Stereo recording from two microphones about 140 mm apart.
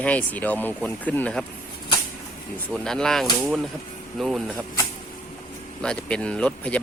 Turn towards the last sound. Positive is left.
turn(degrees=10)  # may be behind; listen again after turning